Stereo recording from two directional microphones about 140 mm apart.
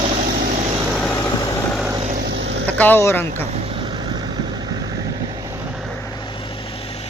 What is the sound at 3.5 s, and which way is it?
Vehicle, 40° right (ahead or behind).